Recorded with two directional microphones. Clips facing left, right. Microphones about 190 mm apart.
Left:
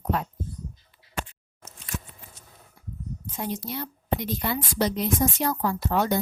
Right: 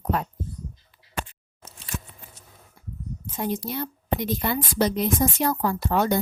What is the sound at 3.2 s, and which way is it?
Speech, 50° right (ahead or behind).